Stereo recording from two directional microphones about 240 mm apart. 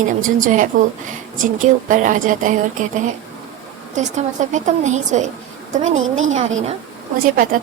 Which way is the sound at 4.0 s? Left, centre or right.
Right.